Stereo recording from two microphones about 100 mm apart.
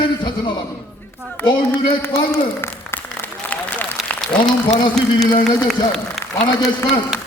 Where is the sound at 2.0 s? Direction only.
25° left (ahead or behind).